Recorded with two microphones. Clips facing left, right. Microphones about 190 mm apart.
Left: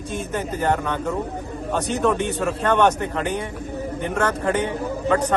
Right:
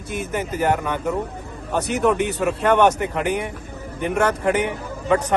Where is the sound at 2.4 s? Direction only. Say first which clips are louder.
Right 2 dB; 10° right (ahead or behind).